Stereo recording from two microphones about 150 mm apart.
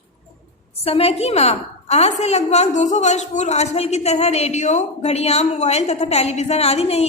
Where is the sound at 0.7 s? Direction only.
40° left (ahead or behind).